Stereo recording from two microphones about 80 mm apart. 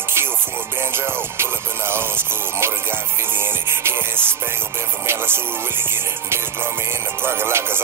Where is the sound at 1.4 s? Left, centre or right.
Right.